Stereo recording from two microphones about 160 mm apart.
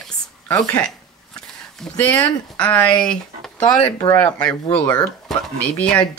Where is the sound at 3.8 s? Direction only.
25° left (ahead or behind).